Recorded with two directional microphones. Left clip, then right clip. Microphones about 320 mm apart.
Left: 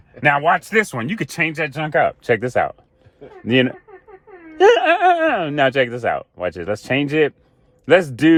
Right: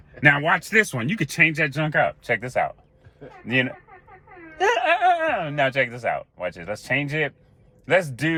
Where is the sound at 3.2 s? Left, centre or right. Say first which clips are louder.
Left 6 dB; left.